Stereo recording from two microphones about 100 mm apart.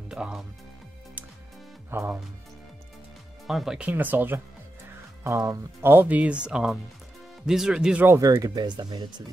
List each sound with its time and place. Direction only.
0.1 s speech: 5° right (ahead or behind)
1.9 s speech: 25° right (ahead or behind)
3.4 s speech: centre (ahead or behind)
3.8 s speech: 20° right (ahead or behind)
5.2 s speech: 30° right (ahead or behind)
5.9 s speech: 20° right (ahead or behind)
8.2 s speech: 35° right (ahead or behind)